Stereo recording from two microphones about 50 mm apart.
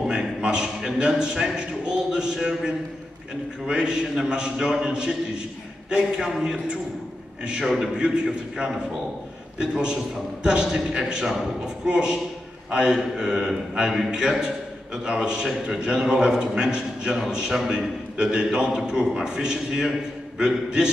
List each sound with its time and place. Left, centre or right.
0.0 s a man's voice: centre
6.4 s a man's voice: centre
7.6 s speech: centre
7.9 s a man's voice: centre